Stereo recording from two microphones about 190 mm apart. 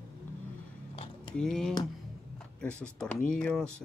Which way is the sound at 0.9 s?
30° left (ahead or behind).